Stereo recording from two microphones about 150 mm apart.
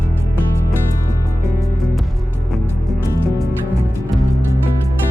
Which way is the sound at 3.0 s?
20° left (ahead or behind).